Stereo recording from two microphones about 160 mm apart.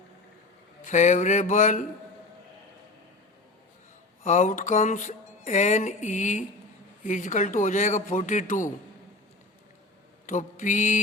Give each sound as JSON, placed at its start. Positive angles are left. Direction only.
{"t": 0.9, "sound": "music", "side_deg": 50}
{"t": 4.2, "sound": "music", "side_deg": 50}
{"t": 10.2, "sound": "music", "side_deg": 50}